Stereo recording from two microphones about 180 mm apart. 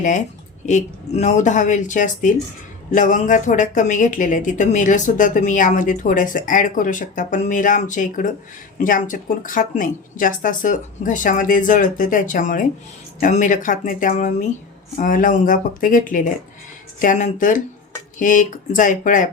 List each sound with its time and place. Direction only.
0.6 s speech: 40° left (ahead or behind)